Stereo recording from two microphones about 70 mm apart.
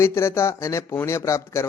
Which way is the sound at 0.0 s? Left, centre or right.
Left.